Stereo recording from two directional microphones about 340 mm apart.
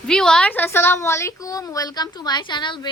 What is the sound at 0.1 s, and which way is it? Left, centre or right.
A woman's voice, centre.